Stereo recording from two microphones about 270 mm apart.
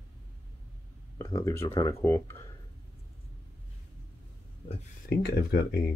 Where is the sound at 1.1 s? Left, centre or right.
Centre.